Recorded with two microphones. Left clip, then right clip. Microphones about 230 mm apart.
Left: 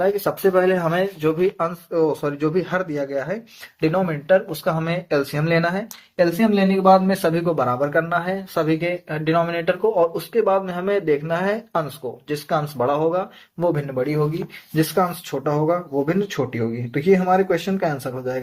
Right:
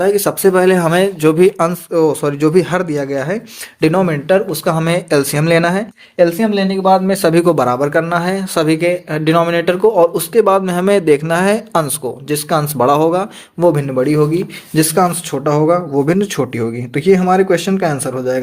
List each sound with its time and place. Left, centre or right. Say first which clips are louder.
0.0 s speech: right 7 dB; right